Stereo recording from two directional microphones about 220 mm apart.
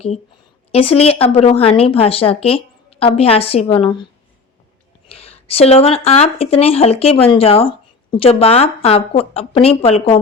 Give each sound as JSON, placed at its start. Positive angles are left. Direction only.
{"t": 0.7, "sound": "speech", "side_deg": 25}
{"t": 5.0, "sound": "speech", "side_deg": 25}